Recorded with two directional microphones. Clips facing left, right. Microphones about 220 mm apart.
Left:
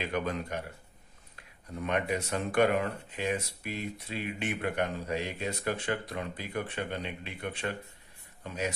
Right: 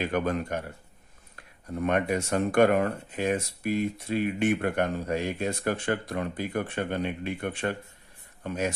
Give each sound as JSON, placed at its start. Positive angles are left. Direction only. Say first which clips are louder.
{"t": 0.0, "sound": "speech", "louder": "right 5 dB", "side_deg": -50}
{"t": 1.8, "sound": "speech", "louder": "right 5 dB", "side_deg": -50}